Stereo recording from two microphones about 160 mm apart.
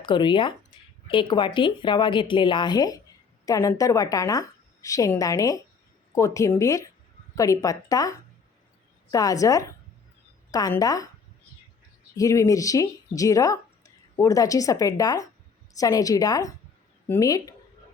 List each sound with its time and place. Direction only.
0.0 s a woman's voice: 30° left (ahead or behind)
9.1 s a woman's voice: 20° left (ahead or behind)
12.1 s a woman's voice: 20° left (ahead or behind)